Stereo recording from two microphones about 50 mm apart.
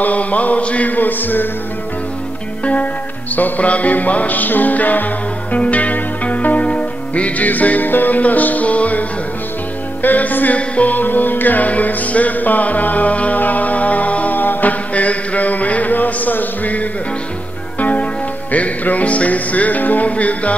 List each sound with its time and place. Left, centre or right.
0.0 s music: left
2.6 s music: left
10.0 s music: left